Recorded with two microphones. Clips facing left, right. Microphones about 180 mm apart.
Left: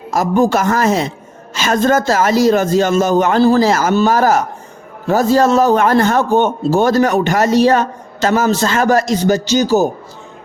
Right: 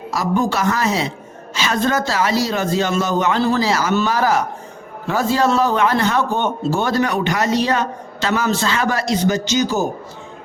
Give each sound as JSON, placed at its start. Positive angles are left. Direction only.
{"t": 0.1, "sound": "speech", "side_deg": 45}